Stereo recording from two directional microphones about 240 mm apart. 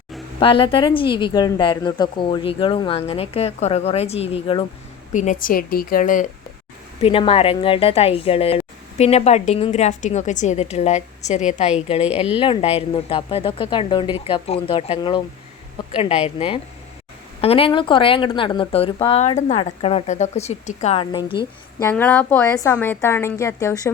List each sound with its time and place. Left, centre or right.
0.3 s a woman's voice: left
7.0 s a woman's voice: left